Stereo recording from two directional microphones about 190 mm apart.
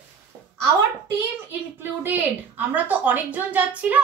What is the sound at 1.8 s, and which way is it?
A woman's voice, 10° right (ahead or behind).